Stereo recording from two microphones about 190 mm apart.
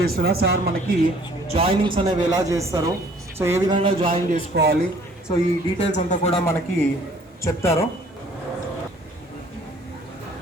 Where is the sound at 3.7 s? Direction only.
25° right (ahead or behind).